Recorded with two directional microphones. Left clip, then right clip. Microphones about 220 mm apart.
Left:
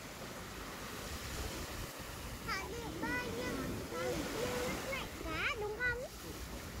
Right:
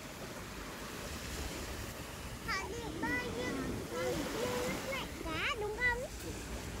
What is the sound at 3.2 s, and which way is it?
Vehicle, 45° left (ahead or behind).